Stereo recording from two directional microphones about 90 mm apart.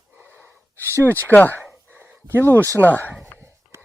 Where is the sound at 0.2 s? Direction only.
25° right (ahead or behind).